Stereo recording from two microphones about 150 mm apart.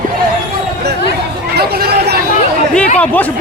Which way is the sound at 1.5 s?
90° right.